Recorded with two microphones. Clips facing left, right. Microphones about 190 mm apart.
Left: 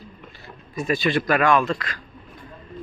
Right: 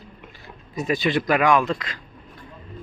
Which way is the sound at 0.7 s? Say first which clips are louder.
Even; 20° right (ahead or behind).